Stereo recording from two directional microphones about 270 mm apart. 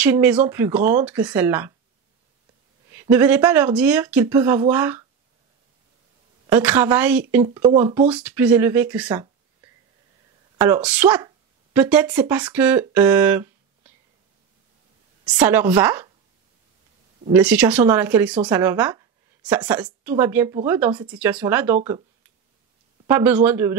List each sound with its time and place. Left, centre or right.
0.0 s speech: centre
2.9 s speech: centre
6.5 s speech: centre
10.6 s speech: centre
15.2 s speech: centre
17.3 s speech: centre
23.0 s speech: centre